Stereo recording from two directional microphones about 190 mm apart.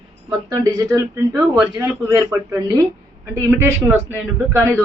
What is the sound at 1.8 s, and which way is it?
A woman's voice, 15° right (ahead or behind).